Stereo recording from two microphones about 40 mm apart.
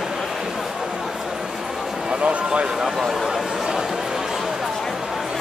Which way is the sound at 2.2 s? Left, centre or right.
Right.